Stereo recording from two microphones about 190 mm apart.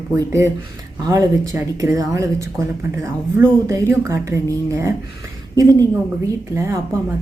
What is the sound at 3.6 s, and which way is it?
A woman's voice, 15° right (ahead or behind).